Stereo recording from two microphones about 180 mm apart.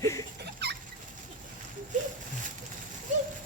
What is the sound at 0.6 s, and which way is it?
Fowl, 65° right (ahead or behind).